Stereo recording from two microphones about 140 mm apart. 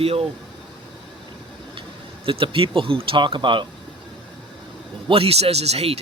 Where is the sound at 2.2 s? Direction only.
40° right (ahead or behind).